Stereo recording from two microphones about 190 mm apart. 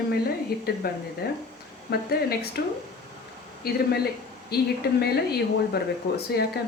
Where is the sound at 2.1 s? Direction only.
55° left (ahead or behind).